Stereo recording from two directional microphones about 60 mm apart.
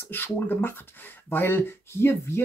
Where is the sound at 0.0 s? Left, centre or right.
Left.